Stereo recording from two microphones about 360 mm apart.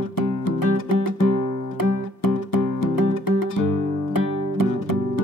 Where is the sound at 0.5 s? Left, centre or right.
Left.